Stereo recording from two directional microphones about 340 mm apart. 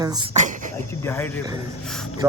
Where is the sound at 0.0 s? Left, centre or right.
Centre.